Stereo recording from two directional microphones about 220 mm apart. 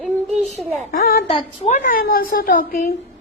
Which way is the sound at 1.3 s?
25° left (ahead or behind).